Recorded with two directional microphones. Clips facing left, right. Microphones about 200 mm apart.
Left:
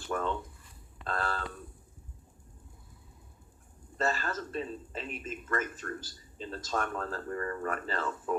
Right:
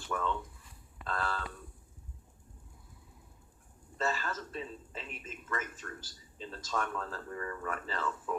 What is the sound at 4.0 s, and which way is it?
Speech, 45° left (ahead or behind).